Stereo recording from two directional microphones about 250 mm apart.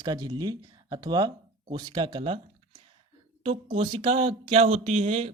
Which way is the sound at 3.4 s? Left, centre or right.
Right.